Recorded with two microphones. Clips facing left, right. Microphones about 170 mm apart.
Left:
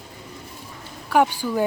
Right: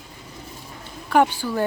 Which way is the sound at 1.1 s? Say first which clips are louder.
Even; 10° left (ahead or behind).